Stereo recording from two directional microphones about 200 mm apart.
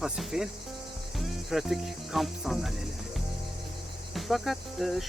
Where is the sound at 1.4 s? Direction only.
Centre (ahead or behind).